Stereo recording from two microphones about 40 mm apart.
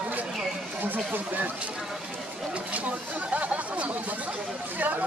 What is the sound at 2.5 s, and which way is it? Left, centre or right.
Speech, right.